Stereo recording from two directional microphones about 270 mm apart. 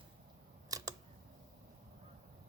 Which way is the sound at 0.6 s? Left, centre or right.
Centre.